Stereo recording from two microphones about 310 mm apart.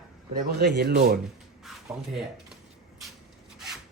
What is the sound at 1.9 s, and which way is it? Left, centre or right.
Speech, centre.